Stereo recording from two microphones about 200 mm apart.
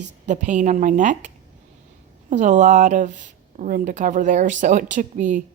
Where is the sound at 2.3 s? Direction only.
40° right (ahead or behind).